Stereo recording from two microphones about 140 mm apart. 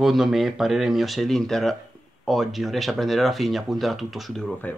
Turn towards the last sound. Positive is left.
turn(degrees=0)  # may be behind; listen again after turning